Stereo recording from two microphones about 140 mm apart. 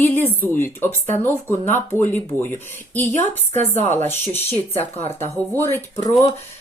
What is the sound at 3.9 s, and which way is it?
Speech, 15° left (ahead or behind).